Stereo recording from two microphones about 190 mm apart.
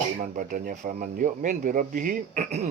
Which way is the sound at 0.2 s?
45° right (ahead or behind).